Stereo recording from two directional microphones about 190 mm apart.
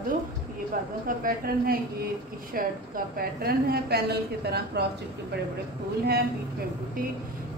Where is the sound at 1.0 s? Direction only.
50° right (ahead or behind).